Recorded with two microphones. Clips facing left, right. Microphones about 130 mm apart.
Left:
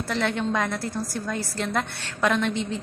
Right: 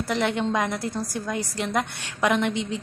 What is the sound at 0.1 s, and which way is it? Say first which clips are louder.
A woman's voice: right 1 dB; 15° right (ahead or behind).